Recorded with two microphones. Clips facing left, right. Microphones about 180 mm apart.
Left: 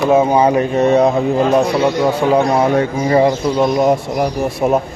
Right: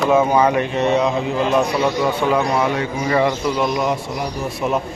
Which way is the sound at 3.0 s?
30° left (ahead or behind).